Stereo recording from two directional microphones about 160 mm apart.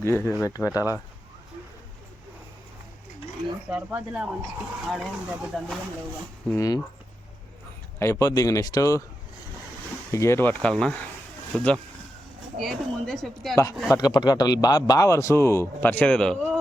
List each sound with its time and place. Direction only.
0.0 s speech: 15° left (ahead or behind)
3.7 s speech: 10° right (ahead or behind)
6.5 s speech: 20° left (ahead or behind)
7.9 s speech: 15° left (ahead or behind)
10.1 s speech: 15° left (ahead or behind); by 13.6 s centre (ahead or behind)
13.9 s speech: 25° left (ahead or behind); by 16.5 s 5° left (ahead or behind)